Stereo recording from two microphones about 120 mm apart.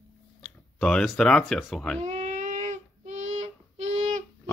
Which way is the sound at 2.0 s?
75° right (ahead or behind).